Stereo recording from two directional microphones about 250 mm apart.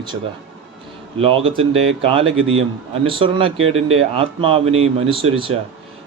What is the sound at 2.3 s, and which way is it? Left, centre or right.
Speech, right.